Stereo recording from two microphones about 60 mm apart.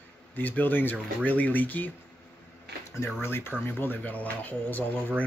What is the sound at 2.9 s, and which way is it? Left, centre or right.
Speech, left.